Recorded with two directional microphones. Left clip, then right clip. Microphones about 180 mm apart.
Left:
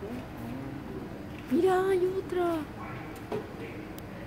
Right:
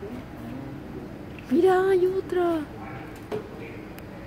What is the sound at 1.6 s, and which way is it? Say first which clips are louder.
Child singing: right 5 dB; 20° right (ahead or behind).